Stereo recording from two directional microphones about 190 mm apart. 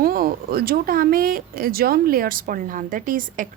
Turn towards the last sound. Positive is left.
turn(degrees=-45)  # may be behind; listen again after turning